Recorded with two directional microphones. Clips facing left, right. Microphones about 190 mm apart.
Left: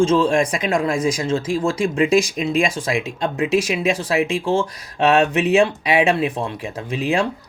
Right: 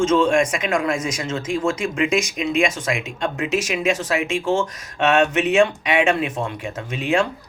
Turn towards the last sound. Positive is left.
turn(degrees=35)  # may be behind; listen again after turning